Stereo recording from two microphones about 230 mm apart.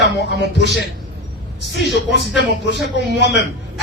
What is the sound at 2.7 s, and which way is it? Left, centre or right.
Speech, left.